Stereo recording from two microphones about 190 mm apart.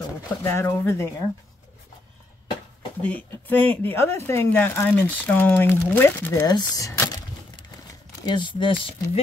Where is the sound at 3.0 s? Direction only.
5° left (ahead or behind).